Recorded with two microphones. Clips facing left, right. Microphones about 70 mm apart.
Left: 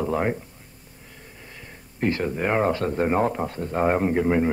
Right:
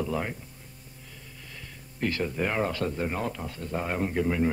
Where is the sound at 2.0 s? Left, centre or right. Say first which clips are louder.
Left 4 dB; left.